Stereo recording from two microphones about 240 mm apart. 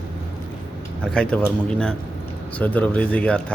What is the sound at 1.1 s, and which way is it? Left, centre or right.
A man's voice, centre.